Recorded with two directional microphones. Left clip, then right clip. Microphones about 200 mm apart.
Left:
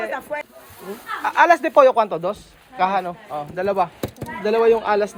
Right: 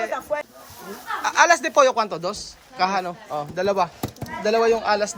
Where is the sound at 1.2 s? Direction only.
5° right (ahead or behind).